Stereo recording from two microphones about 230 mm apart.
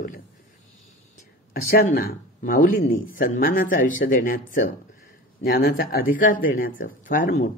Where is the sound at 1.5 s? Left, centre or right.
Left.